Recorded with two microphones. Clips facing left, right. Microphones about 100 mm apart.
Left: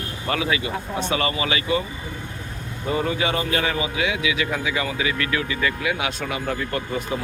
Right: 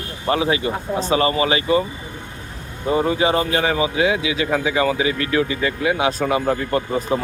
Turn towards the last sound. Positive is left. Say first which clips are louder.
# right 6 dB
turn(degrees=-30)  # may be behind; listen again after turning